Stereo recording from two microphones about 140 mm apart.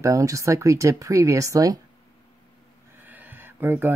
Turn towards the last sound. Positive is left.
turn(degrees=-15)  # may be behind; listen again after turning